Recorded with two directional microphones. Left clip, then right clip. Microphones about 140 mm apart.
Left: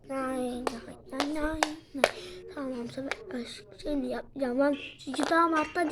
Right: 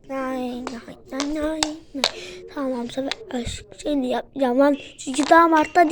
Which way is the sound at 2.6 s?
40° right (ahead or behind).